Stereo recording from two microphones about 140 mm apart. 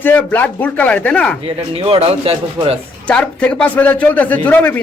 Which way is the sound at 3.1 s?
10° left (ahead or behind).